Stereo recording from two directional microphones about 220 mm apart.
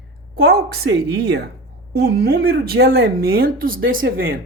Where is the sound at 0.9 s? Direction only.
50° right (ahead or behind).